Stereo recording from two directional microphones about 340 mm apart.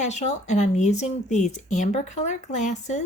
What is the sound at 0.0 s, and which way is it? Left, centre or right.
Speech, centre.